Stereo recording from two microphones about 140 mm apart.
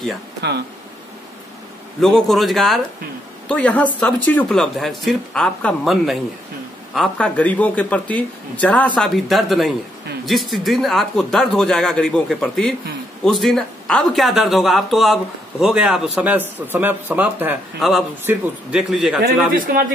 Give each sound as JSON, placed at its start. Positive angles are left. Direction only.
{"t": 2.0, "sound": "a man's voice", "side_deg": 0}
{"t": 17.7, "sound": "speech", "side_deg": 0}
{"t": 18.2, "sound": "speech", "side_deg": -10}
{"t": 19.5, "sound": "speech", "side_deg": -75}